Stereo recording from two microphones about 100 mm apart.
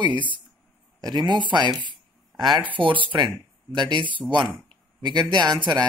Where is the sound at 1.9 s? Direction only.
45° right (ahead or behind).